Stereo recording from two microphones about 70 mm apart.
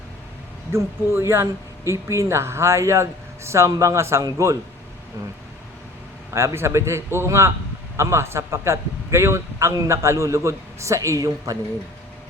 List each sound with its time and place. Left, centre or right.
0.7 s a man's voice: right
6.3 s a man's voice: right